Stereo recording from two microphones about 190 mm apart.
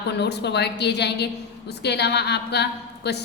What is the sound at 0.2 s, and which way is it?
A woman's voice, 60° left (ahead or behind).